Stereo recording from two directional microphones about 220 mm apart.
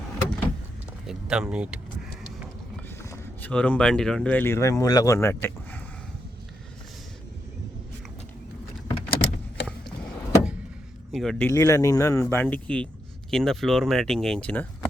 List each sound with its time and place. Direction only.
1.0 s speech: 5° right (ahead or behind)
3.0 s speech: 10° left (ahead or behind)
9.0 s vehicle: 45° left (ahead or behind)
11.1 s speech: centre (ahead or behind)